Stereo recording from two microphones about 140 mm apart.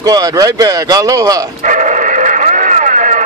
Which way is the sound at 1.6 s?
65° right (ahead or behind).